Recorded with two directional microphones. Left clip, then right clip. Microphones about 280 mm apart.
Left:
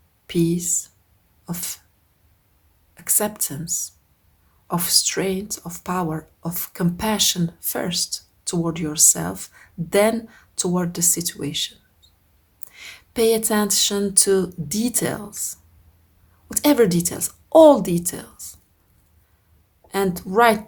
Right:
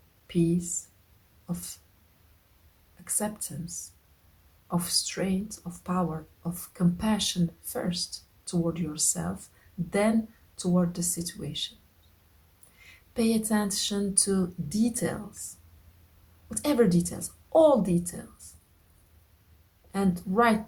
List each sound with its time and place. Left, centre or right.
0.3 s speech: left
3.0 s speech: left
12.8 s speech: left
16.5 s speech: left
19.9 s speech: left